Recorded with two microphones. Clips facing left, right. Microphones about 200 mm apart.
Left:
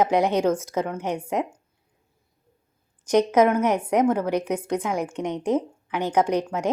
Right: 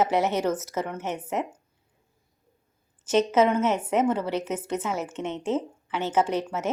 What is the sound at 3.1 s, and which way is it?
A woman's voice, 10° left (ahead or behind).